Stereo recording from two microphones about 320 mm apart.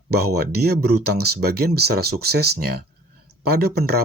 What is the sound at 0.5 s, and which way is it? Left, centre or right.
Speech, right.